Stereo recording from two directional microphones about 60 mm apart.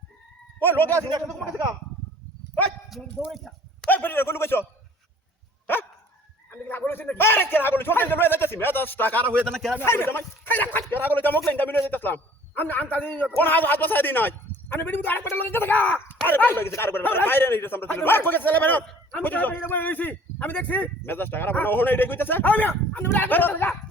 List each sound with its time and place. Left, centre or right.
0.6 s speech: left
1.3 s a man's voice: centre
3.8 s speech: left
6.5 s speech: left
9.8 s speech: left